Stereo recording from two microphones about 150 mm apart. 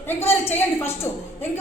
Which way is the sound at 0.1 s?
15° left (ahead or behind).